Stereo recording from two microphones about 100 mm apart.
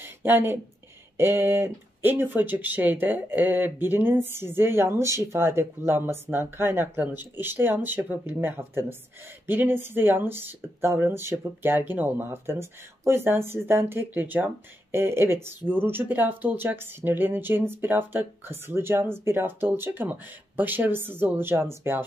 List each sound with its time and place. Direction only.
0.0 s speech: 20° right (ahead or behind)